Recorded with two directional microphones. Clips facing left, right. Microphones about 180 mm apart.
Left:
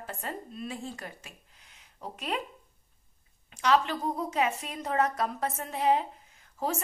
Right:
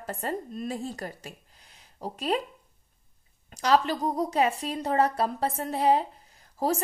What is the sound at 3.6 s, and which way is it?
Speech, 35° right (ahead or behind).